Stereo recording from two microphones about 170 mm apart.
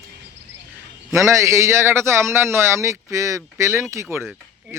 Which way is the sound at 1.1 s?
15° right (ahead or behind).